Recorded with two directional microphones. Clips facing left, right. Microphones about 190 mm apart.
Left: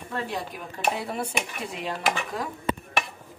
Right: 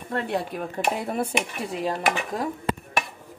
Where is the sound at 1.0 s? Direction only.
50° right (ahead or behind).